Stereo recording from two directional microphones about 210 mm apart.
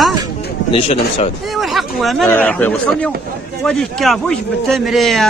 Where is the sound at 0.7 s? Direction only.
25° left (ahead or behind).